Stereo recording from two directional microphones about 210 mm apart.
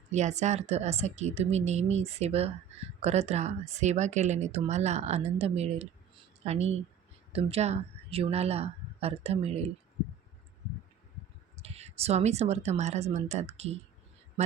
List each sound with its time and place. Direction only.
0.1 s speech: 35° right (ahead or behind)
11.5 s speech: 30° right (ahead or behind)